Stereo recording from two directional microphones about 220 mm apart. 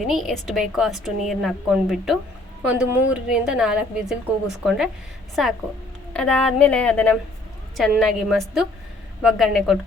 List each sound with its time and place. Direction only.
0.1 s a woman's voice: centre (ahead or behind)